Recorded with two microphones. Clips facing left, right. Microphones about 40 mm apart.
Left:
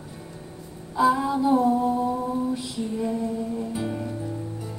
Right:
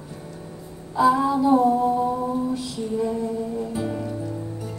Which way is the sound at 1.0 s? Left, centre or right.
Centre.